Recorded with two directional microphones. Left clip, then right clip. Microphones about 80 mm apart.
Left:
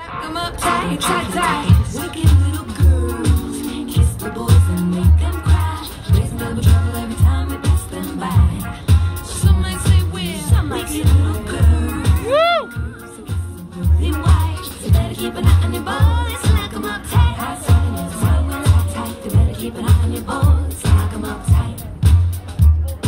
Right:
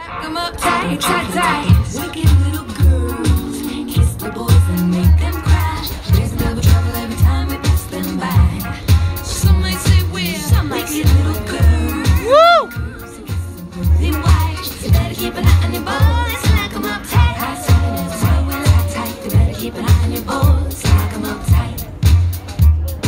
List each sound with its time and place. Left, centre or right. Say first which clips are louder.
0.1 s music: right 2 dB; left
12.3 s music: right 6 dB; right
14.0 s music: right 3 dB; left